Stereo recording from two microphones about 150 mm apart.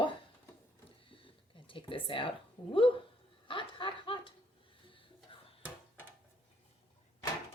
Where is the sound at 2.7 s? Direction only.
35° left (ahead or behind).